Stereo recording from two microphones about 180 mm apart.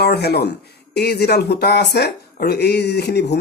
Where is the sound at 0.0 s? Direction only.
65° left (ahead or behind).